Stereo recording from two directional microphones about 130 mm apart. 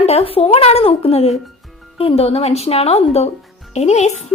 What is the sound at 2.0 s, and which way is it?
A woman's voice, 45° left (ahead or behind).